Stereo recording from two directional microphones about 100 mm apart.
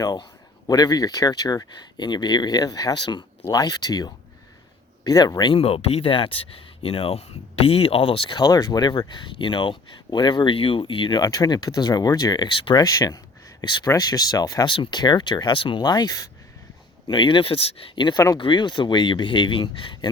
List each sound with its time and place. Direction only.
0.0 s speech: 45° left (ahead or behind)
5.5 s speech: 75° left (ahead or behind); by 11.2 s 55° left (ahead or behind)
11.2 s speech: 40° left (ahead or behind); by 12.8 s 55° left (ahead or behind)
12.8 s speech: 40° left (ahead or behind)
13.6 s speech: 50° left (ahead or behind)
13.8 s speech: 40° left (ahead or behind)
14.7 s speech: 55° left (ahead or behind)
15.8 s speech: 45° left (ahead or behind)
17.1 s speech: 55° left (ahead or behind)